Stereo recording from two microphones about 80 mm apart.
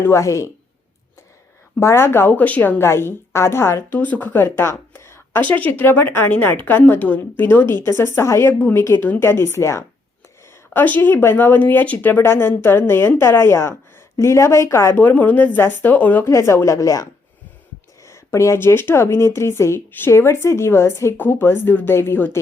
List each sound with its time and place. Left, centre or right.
0.0 s speech: left
1.8 s a woman's voice: left
2.8 s speech: left
3.9 s speech: left
5.5 s a woman's voice: centre; by 9.8 s left
10.8 s a woman's voice: left
15.0 s a woman's voice: left
16.2 s speech: left